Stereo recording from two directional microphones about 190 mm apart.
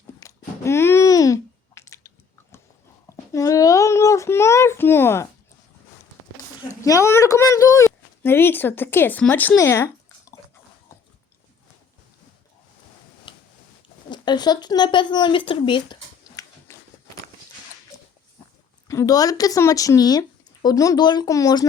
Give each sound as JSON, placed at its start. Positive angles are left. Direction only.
{"t": 0.2, "sound": "a sound", "side_deg": 15}
{"t": 6.7, "sound": "speech", "side_deg": 15}
{"t": 13.3, "sound": "tick-tock", "side_deg": 25}
{"t": 14.1, "sound": "speech", "side_deg": 20}
{"t": 18.9, "sound": "speech", "side_deg": 15}